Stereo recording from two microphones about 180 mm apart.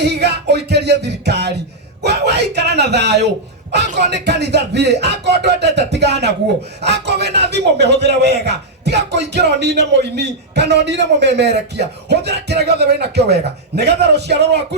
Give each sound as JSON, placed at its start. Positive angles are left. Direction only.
{"t": 0.0, "sound": "a man's voice", "side_deg": -65}